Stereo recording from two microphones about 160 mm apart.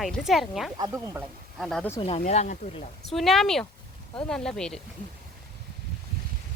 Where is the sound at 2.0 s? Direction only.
40° left (ahead or behind).